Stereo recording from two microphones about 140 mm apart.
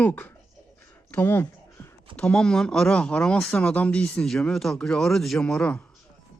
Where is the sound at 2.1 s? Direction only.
5° left (ahead or behind).